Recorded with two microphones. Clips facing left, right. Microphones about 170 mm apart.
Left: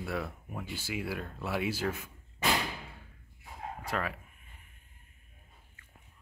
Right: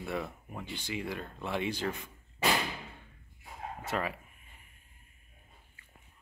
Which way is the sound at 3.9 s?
Centre (ahead or behind).